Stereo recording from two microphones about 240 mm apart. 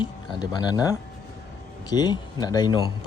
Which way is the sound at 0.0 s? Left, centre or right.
Centre.